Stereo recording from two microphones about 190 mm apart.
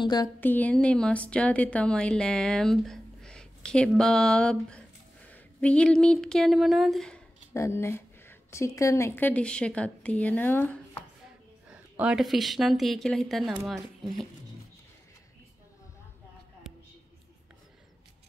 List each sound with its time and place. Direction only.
0.0 s speech: 20° left (ahead or behind)
0.4 s a woman's voice: 10° left (ahead or behind)
7.5 s a woman's voice: 15° left (ahead or behind)
11.7 s speech: 5° right (ahead or behind)